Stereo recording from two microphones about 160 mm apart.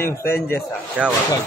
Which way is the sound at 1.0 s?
5° right (ahead or behind).